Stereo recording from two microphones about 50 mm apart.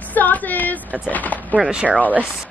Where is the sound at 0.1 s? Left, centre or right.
Left.